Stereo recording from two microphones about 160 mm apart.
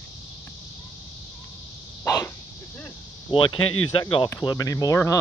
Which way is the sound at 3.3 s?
30° left (ahead or behind).